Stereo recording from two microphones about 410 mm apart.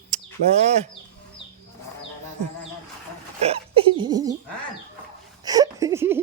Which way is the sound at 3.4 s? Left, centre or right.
Centre.